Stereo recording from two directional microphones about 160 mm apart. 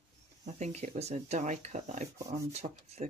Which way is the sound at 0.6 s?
45° right (ahead or behind).